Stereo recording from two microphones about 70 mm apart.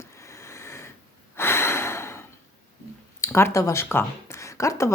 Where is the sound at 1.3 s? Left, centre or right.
Left.